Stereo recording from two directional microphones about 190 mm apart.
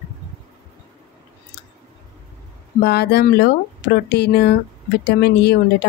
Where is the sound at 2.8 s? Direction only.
60° left (ahead or behind).